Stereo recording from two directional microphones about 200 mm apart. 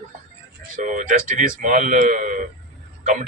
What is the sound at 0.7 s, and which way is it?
A man's voice, 40° right (ahead or behind).